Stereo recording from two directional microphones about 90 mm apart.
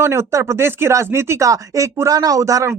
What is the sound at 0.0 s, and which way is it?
Speech, 30° right (ahead or behind).